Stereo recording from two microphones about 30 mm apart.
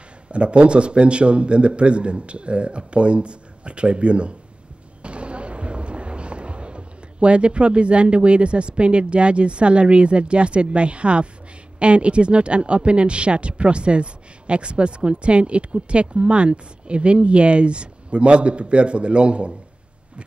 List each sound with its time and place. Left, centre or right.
0.3 s speech: right